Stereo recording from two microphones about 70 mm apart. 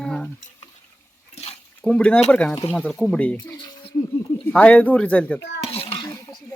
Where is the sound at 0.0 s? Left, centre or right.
Centre.